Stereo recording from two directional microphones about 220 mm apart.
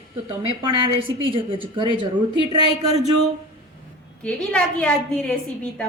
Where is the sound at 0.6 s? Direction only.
20° right (ahead or behind).